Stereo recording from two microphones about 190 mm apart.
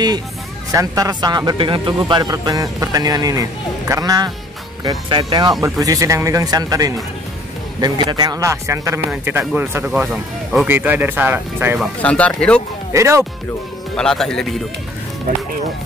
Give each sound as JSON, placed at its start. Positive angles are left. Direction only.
{"t": 0.7, "sound": "speech", "side_deg": -20}
{"t": 12.0, "sound": "speech", "side_deg": 5}
{"t": 12.9, "sound": "speech", "side_deg": -15}
{"t": 13.9, "sound": "speech", "side_deg": 5}